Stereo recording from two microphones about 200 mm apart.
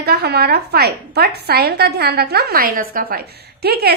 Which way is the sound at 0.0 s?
50° right (ahead or behind).